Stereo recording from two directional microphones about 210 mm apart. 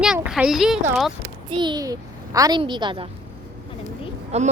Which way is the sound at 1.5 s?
20° right (ahead or behind).